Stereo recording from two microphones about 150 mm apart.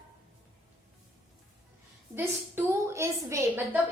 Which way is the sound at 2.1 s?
15° right (ahead or behind).